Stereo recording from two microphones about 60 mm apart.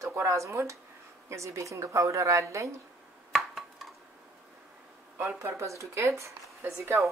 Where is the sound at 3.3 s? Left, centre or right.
Centre.